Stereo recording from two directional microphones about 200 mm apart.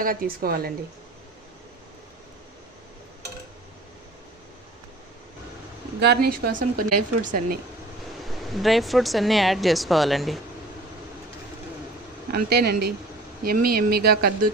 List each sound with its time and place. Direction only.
0.0 s speech: 45° right (ahead or behind)
6.0 s speech: 55° right (ahead or behind)
8.2 s speech: centre (ahead or behind)
12.3 s speech: 50° right (ahead or behind)